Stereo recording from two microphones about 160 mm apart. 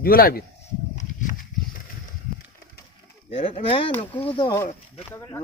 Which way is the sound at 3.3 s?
35° left (ahead or behind).